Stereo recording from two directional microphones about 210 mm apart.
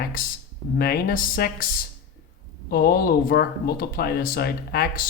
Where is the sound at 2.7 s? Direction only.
45° left (ahead or behind).